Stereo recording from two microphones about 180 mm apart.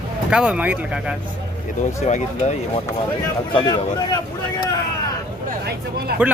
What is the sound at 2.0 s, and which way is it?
Speech, 40° left (ahead or behind).